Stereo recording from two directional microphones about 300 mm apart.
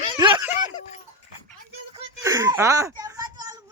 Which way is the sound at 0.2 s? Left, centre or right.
Centre.